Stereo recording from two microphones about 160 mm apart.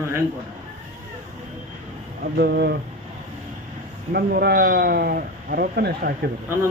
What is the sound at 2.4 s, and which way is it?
Speech, 90° right.